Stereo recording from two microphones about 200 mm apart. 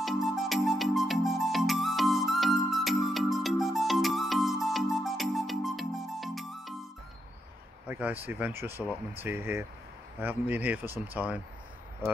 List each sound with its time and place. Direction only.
0.0 s music: centre (ahead or behind)
7.9 s speech: 10° right (ahead or behind)